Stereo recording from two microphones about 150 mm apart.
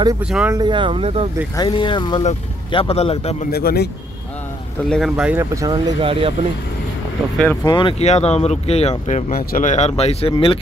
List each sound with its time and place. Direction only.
0.2 s speech: 5° right (ahead or behind)
0.5 s speech: 30° right (ahead or behind)
1.6 s speech: 30° left (ahead or behind)
2.7 s a man's voice: 40° left (ahead or behind)
3.5 s speech: 90° left
4.8 s speech: centre (ahead or behind)
5.4 s speech: 20° right (ahead or behind)
5.9 s speech: 35° right (ahead or behind)
7.6 s a man's voice: 30° left (ahead or behind)
8.0 s speech: 45° left (ahead or behind)
9.3 s a man's voice: 65° left (ahead or behind); by 10.6 s 35° left (ahead or behind)